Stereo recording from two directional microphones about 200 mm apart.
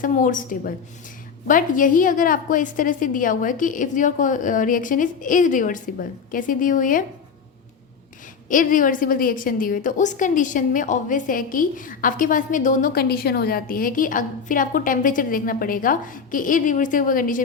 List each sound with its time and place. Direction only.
0.0 s a woman's voice: 40° left (ahead or behind)
8.4 s a woman's voice: 40° left (ahead or behind)